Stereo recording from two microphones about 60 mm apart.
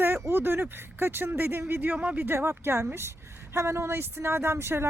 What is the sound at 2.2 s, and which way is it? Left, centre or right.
Speech, right.